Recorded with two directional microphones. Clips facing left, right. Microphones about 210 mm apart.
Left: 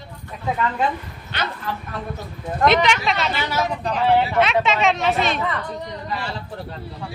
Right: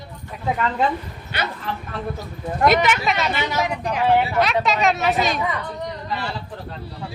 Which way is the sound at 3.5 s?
15° right (ahead or behind).